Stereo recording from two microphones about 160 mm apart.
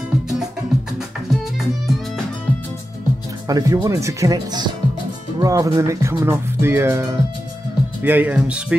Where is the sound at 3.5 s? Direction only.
20° right (ahead or behind).